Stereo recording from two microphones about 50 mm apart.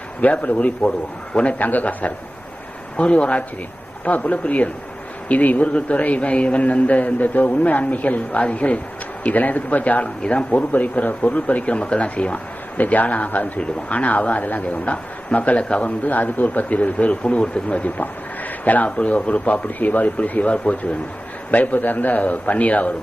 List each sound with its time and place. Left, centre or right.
0.2 s a man's voice: left